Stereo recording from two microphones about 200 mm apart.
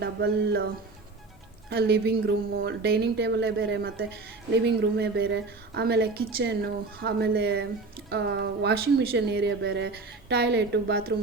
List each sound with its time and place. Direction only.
0.0 s speech: 55° right (ahead or behind)
1.7 s speech: 55° right (ahead or behind)